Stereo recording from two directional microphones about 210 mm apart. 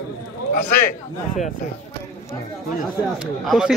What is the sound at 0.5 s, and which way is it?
Speech, 40° left (ahead or behind).